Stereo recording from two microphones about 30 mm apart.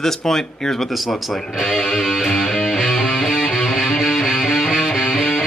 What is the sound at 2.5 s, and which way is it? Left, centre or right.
Music, centre.